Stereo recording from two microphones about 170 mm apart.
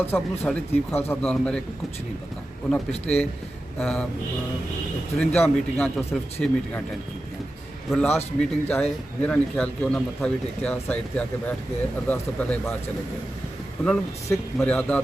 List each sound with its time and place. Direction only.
0.0 s a man's voice: 10° left (ahead or behind)
3.8 s speech: 5° left (ahead or behind)
5.1 s a man's voice: 5° left (ahead or behind)
7.9 s a man's voice: 5° left (ahead or behind)
14.3 s a man's voice: 10° left (ahead or behind)